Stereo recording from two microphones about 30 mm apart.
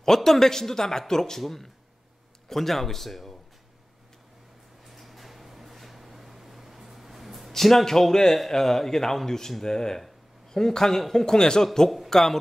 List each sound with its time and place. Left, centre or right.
0.0 s speech: centre
4.8 s a sound: centre
7.5 s speech: centre